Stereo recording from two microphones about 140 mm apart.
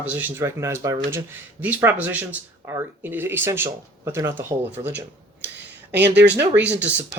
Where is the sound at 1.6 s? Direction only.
10° right (ahead or behind).